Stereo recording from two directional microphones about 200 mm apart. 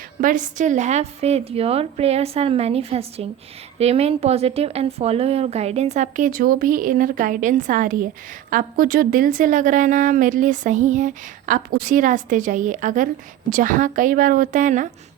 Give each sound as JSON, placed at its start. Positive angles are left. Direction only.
{"t": 0.2, "sound": "a woman's voice", "side_deg": -40}